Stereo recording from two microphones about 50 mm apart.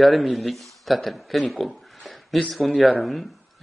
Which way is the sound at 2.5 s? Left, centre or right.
Centre.